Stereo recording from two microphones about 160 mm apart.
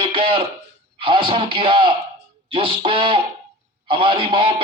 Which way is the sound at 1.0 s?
30° right (ahead or behind).